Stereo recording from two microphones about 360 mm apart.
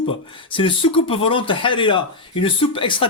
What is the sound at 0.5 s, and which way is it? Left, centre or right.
Speech, centre.